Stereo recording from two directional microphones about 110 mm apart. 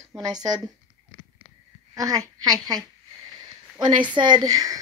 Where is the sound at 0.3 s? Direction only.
35° right (ahead or behind).